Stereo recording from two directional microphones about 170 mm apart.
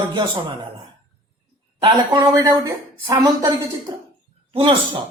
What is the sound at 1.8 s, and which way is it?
Speech, 25° right (ahead or behind).